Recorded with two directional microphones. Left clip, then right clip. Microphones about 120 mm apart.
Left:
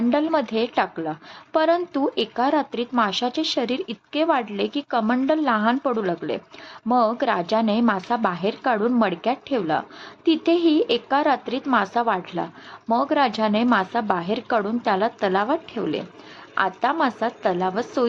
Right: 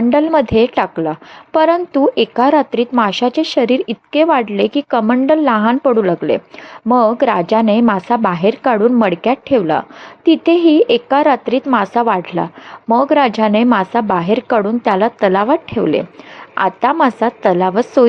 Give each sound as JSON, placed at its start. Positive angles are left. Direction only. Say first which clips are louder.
{"t": 0.1, "sound": "a woman's voice", "louder": "right 10 dB", "side_deg": -40}